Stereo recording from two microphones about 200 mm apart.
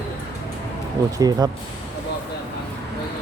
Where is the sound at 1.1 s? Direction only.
15° right (ahead or behind).